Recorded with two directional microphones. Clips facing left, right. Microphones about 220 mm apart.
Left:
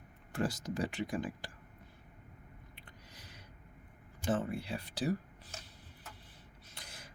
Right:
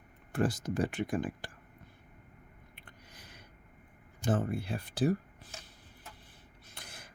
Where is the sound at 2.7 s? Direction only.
55° right (ahead or behind).